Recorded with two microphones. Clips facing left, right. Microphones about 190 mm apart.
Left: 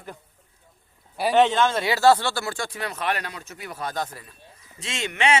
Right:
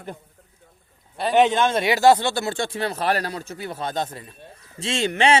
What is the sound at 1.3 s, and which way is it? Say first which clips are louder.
Speech: right 2 dB; 15° right (ahead or behind).